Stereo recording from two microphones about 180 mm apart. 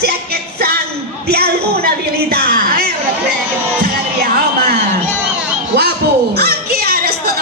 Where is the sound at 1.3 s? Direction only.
60° right (ahead or behind).